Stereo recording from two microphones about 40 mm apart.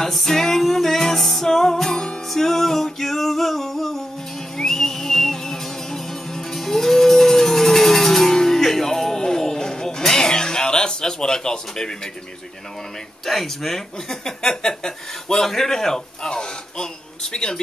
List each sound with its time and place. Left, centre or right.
0.0 s music: centre
13.2 s speech: centre
16.3 s a sound: centre